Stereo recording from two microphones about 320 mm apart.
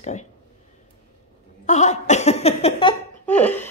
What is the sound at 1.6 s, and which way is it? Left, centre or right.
Speech, left.